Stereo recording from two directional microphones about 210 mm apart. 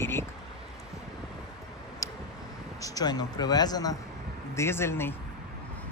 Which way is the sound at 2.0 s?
15° left (ahead or behind).